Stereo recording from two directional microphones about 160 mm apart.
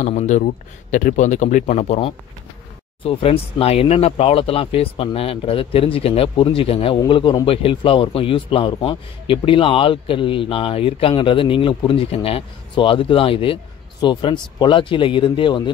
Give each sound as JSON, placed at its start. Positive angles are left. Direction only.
{"t": 0.0, "sound": "speech", "side_deg": 45}
{"t": 3.0, "sound": "a man's voice", "side_deg": 35}